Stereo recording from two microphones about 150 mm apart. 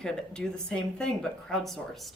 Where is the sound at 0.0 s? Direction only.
5° left (ahead or behind).